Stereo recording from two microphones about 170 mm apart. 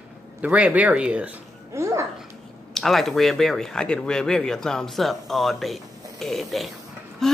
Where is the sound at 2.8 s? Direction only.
Centre (ahead or behind).